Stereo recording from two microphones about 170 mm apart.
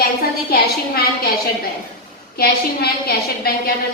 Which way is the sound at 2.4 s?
65° left (ahead or behind).